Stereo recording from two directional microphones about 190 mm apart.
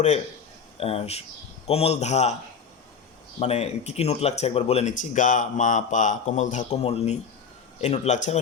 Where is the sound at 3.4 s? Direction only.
35° left (ahead or behind).